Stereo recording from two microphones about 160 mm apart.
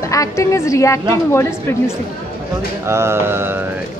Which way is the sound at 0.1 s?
20° left (ahead or behind).